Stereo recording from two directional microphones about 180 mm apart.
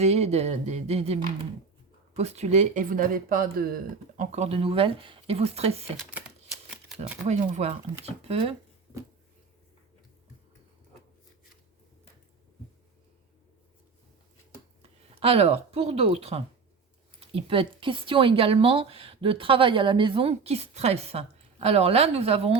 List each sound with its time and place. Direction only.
0.0 s speech: 35° right (ahead or behind); by 3.8 s 55° right (ahead or behind)
4.2 s speech: 40° right (ahead or behind)
6.0 s typewriter: 5° right (ahead or behind)
7.3 s speech: 40° right (ahead or behind)
14.8 s speech: 30° right (ahead or behind)